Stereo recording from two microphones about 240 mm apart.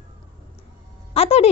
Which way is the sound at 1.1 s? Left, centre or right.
Left.